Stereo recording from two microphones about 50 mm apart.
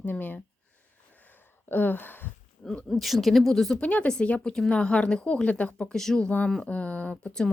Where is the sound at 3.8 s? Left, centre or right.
Left.